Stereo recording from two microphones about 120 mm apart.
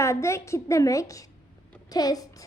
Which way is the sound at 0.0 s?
25° left (ahead or behind).